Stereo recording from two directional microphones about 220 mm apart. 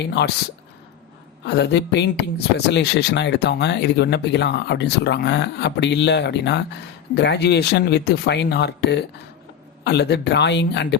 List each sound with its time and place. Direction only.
0.0 s speech: 50° left (ahead or behind)
1.5 s speech: 50° left (ahead or behind)